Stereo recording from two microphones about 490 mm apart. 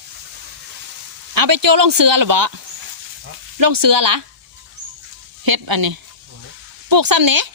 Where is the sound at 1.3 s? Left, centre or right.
Right.